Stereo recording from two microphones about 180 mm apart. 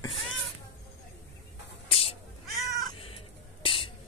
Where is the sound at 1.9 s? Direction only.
35° left (ahead or behind).